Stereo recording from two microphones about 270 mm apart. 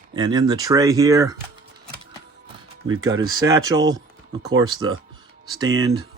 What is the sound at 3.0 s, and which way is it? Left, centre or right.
Speech, centre.